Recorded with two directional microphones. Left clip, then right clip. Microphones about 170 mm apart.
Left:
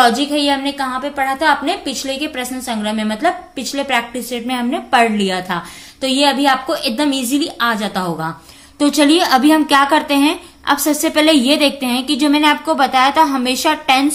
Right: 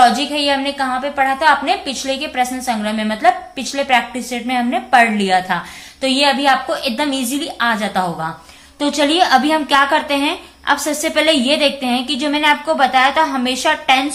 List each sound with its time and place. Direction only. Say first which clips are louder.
0.0 s a woman's voice: right 1 dB; 30° left (ahead or behind)